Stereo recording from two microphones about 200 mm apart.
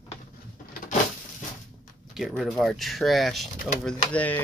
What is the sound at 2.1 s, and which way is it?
Speech, centre (ahead or behind).